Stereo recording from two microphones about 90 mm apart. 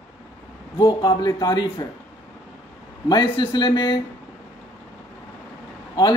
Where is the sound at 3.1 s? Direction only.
60° left (ahead or behind).